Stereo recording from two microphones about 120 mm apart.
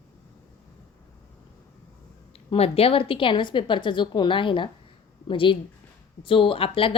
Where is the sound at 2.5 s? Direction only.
55° left (ahead or behind).